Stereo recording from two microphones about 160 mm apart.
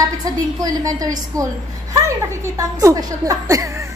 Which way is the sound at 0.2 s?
25° right (ahead or behind).